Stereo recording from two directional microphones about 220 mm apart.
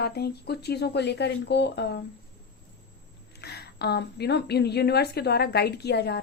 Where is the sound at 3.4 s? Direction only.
45° left (ahead or behind).